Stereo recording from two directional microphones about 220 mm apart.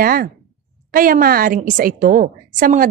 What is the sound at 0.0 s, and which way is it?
A woman's voice, 40° right (ahead or behind).